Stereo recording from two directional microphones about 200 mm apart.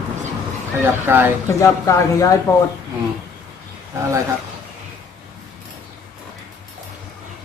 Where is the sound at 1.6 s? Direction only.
15° left (ahead or behind).